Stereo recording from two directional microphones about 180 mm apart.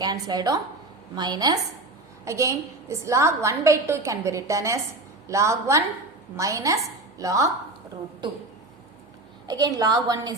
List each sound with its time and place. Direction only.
0.0 s a woman's voice: 20° right (ahead or behind)
9.5 s a woman's voice: 20° right (ahead or behind)